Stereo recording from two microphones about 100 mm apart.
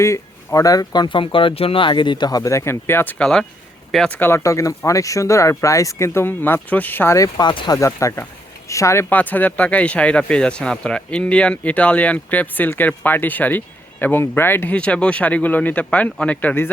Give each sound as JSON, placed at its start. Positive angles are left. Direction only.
{"t": 0.0, "sound": "speech", "side_deg": 30}
{"t": 1.0, "sound": "speech", "side_deg": 55}
{"t": 7.2, "sound": "speech", "side_deg": 40}
{"t": 7.7, "sound": "speech", "side_deg": 30}